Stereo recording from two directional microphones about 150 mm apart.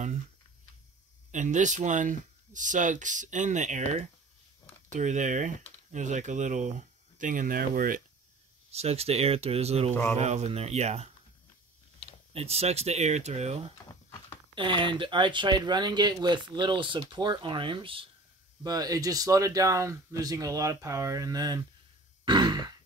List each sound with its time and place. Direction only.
1.3 s speech: 55° right (ahead or behind)
8.7 s speech: 45° right (ahead or behind)
12.3 s speech: 45° right (ahead or behind)
14.5 s speech: 35° right (ahead or behind)
22.2 s grunt: 30° right (ahead or behind)